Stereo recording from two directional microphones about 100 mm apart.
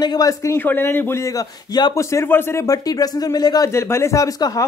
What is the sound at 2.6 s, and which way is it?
Speech, 35° left (ahead or behind).